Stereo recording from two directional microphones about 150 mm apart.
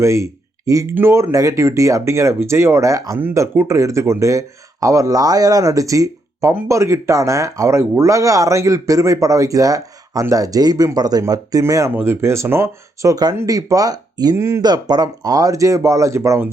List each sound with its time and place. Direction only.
0.0 s speech: 20° right (ahead or behind)